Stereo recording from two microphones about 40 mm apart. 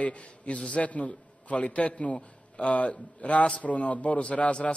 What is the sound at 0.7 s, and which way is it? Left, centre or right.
A man's voice, left.